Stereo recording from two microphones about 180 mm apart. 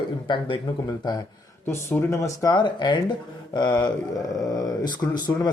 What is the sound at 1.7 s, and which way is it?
Speech, 15° left (ahead or behind).